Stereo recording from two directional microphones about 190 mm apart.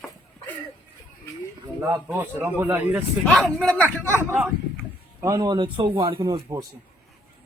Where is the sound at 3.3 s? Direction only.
5° left (ahead or behind).